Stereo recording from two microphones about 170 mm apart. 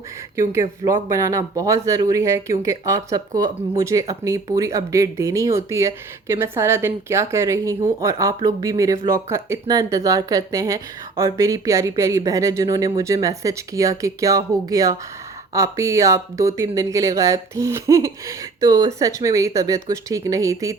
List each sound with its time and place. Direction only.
0.3 s speech: 20° right (ahead or behind)